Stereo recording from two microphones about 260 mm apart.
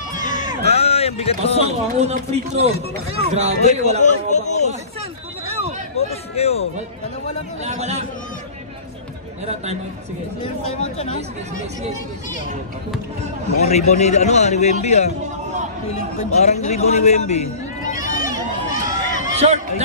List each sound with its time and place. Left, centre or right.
0.1 s a sound: left
1.7 s a man's voice: right
3.6 s a man's voice: left
6.0 s a man's voice: left
7.6 s a man's voice: right
13.6 s a man's voice: left
18.0 s run: left
19.3 s speech: right